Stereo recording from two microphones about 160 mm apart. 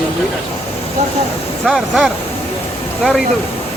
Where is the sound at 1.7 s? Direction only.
Centre (ahead or behind).